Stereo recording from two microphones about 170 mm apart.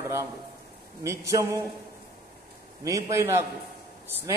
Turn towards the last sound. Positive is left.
turn(degrees=-15)  # may be behind; listen again after turning